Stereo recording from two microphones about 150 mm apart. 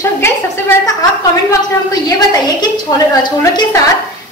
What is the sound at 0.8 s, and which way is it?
A woman's voice, 25° left (ahead or behind).